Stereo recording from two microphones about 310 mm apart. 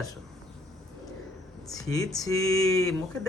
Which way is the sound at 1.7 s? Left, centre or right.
Centre.